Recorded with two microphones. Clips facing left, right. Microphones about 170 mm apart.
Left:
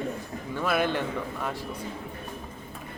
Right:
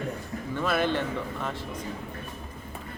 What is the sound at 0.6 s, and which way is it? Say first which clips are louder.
Speech: even; 10° left (ahead or behind).